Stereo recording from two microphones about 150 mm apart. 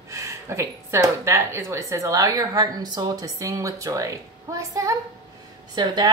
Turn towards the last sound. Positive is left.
turn(degrees=-30)  # may be behind; listen again after turning